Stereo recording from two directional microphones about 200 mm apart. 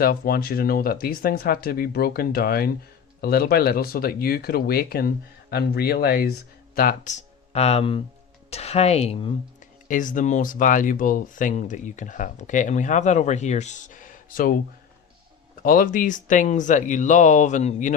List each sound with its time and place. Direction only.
0.0 s speech: 50° left (ahead or behind); by 9.3 s 30° left (ahead or behind)
9.9 s speech: 40° left (ahead or behind)
15.6 s speech: 45° left (ahead or behind)